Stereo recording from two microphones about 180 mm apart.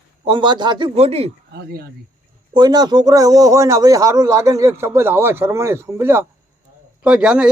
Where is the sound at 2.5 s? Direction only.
25° right (ahead or behind).